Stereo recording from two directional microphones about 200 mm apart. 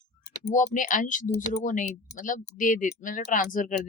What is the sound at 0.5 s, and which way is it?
Speech, 40° left (ahead or behind).